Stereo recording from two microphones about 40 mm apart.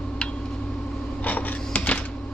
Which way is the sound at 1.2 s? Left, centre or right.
Left.